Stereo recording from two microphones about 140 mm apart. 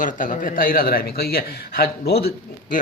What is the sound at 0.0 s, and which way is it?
A man's voice, 70° left (ahead or behind).